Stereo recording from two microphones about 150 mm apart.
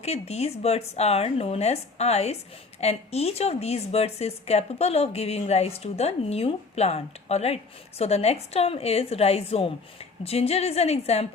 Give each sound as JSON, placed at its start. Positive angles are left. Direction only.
{"t": 0.0, "sound": "a woman's voice", "side_deg": 45}